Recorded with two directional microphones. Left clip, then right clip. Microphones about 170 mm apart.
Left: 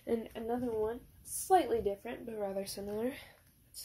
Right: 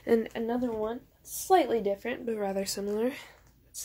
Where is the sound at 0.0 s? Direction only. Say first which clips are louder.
Right 9 dB; 45° right (ahead or behind).